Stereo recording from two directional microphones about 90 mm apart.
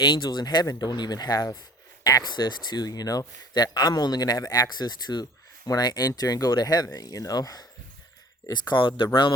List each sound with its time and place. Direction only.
0.0 s speech: 55° left (ahead or behind)
8.5 s speech: 60° left (ahead or behind)